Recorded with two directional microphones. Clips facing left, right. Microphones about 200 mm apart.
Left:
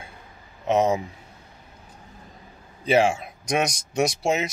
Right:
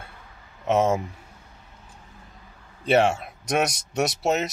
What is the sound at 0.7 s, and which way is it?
Speech, centre (ahead or behind).